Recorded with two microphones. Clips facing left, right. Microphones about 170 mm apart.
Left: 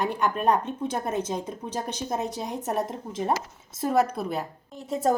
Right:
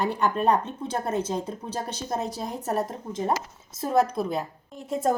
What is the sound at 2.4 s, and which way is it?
A woman's voice, centre (ahead or behind).